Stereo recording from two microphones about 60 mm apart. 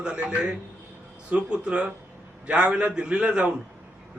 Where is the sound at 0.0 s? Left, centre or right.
Centre.